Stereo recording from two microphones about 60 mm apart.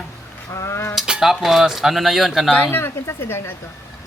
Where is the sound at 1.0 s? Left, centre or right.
Centre.